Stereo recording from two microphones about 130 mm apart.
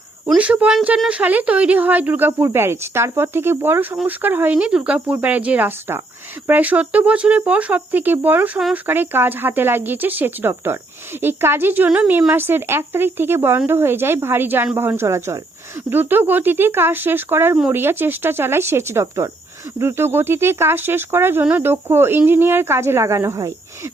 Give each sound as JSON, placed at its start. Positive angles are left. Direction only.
{"t": 0.3, "sound": "speech", "side_deg": -10}